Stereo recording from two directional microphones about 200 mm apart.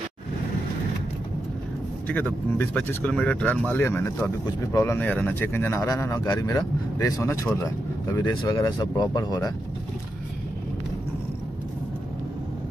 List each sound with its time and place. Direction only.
2.5 s speech: 10° left (ahead or behind)